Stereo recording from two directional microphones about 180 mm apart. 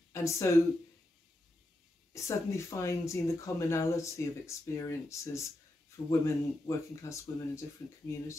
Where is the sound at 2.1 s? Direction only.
15° left (ahead or behind).